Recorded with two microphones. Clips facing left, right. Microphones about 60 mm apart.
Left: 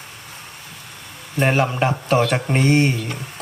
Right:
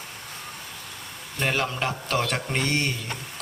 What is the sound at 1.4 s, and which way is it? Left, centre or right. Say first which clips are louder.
Mantra: left 8 dB; left.